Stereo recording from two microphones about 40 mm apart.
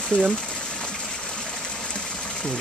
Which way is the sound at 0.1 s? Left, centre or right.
Left.